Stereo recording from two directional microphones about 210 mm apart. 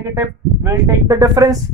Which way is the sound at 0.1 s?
15° right (ahead or behind).